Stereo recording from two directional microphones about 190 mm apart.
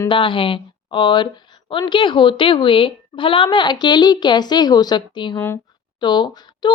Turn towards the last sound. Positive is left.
turn(degrees=25)  # may be behind; listen again after turning